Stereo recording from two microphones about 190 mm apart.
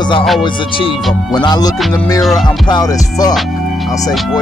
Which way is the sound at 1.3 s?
20° left (ahead or behind).